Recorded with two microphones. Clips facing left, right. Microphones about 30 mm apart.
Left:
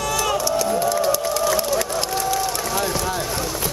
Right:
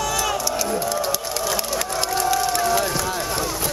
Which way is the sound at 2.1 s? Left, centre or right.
Centre.